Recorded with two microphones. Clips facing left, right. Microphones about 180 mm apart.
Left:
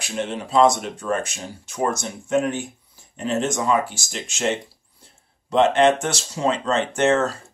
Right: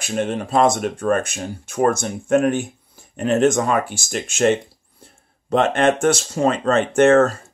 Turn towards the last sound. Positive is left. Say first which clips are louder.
# right 6 dB
turn(degrees=-50)  # may be behind; listen again after turning